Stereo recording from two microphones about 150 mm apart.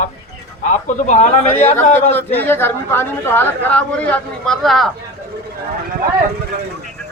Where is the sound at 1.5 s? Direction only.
15° left (ahead or behind).